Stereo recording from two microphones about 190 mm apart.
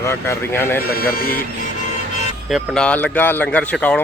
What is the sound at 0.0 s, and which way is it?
Speech, 15° left (ahead or behind).